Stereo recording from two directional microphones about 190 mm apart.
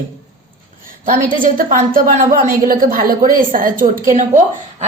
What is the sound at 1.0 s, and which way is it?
A woman's voice, 45° right (ahead or behind).